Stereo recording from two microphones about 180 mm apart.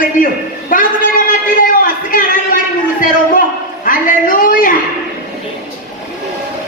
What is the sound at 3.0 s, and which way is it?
A woman's voice, 50° left (ahead or behind).